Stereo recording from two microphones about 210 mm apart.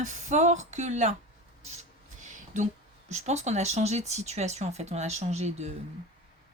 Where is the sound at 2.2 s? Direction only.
35° right (ahead or behind).